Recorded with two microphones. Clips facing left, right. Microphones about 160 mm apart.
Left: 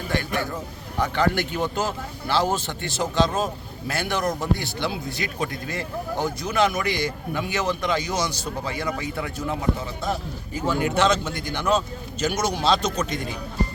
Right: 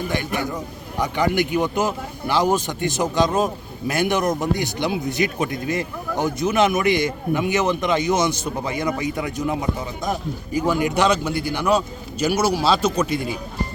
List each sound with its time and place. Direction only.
0.1 s speech: 15° right (ahead or behind)